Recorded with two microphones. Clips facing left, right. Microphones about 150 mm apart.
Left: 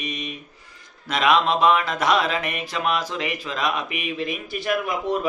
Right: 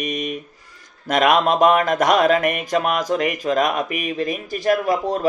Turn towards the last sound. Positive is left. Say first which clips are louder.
# right 4 dB
turn(degrees=-40)  # may be behind; listen again after turning